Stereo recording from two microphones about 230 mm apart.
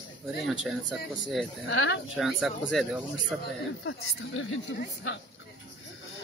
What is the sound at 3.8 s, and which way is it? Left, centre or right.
Speech, left.